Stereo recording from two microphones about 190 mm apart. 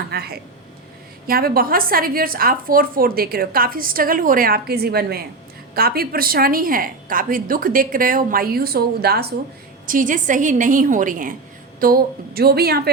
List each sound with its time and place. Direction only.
0.1 s a woman's voice: 55° right (ahead or behind)
9.8 s a woman's voice: 45° right (ahead or behind)